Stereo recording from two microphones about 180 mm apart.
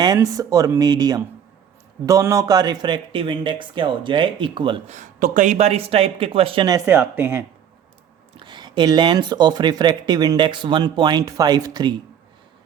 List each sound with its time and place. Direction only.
0.0 s speech: 20° right (ahead or behind)
4.9 s speech: 45° right (ahead or behind); by 7.4 s 10° right (ahead or behind)
8.4 s speech: 25° right (ahead or behind)